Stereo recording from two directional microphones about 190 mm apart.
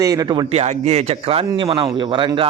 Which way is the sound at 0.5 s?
35° right (ahead or behind).